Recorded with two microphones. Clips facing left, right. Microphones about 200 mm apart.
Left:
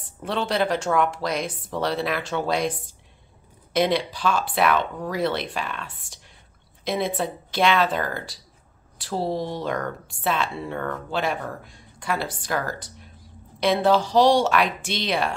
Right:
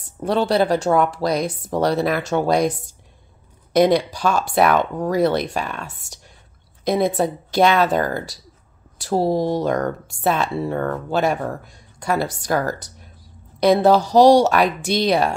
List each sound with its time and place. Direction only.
0.2 s speech: 40° right (ahead or behind)